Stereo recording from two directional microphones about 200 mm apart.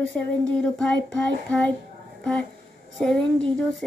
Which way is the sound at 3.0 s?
5° left (ahead or behind).